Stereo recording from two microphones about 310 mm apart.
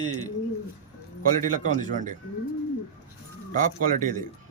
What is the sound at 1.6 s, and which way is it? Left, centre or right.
Speech, right.